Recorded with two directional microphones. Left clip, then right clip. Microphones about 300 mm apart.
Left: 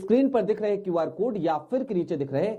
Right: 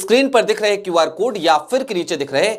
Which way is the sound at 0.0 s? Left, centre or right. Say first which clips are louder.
Right 9 dB; centre.